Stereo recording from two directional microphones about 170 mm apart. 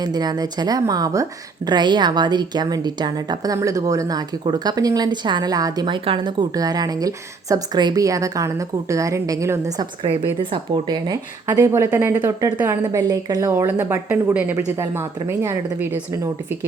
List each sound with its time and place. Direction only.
0.0 s a woman's voice: 25° right (ahead or behind)